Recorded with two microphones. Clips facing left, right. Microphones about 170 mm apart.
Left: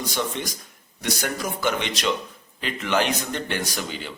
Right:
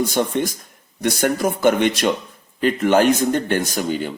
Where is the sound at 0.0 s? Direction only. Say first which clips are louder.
Right 8 dB; 50° right (ahead or behind).